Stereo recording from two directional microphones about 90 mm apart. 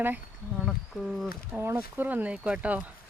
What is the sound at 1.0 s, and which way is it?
Speech, centre (ahead or behind).